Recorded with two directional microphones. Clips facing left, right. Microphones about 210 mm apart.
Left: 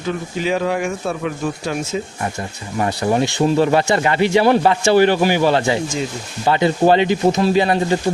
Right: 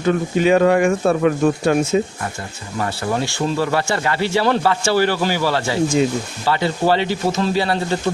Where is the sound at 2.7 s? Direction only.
20° left (ahead or behind).